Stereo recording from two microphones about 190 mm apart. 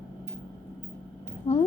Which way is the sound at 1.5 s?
35° left (ahead or behind).